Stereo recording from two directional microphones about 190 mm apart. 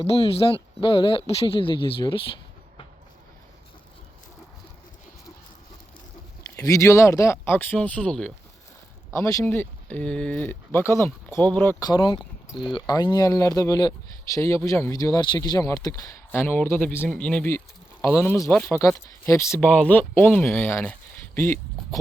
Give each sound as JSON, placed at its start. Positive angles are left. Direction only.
{"t": 0.1, "sound": "speech", "side_deg": 30}
{"t": 6.6, "sound": "speech", "side_deg": 15}
{"t": 9.1, "sound": "speech", "side_deg": 15}
{"t": 11.9, "sound": "speech", "side_deg": 25}
{"t": 12.2, "sound": "cricket", "side_deg": 0}
{"t": 12.7, "sound": "speech", "side_deg": 20}